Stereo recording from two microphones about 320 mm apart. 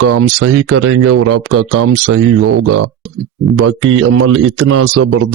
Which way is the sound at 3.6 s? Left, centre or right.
Right.